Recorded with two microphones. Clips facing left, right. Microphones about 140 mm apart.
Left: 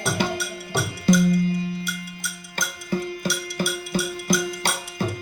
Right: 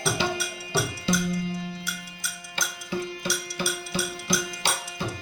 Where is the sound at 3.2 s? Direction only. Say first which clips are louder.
Left 4 dB; 50° left (ahead or behind).